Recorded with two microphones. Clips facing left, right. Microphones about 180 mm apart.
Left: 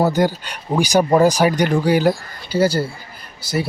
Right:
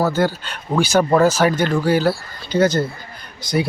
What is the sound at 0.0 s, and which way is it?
Speech, 15° left (ahead or behind).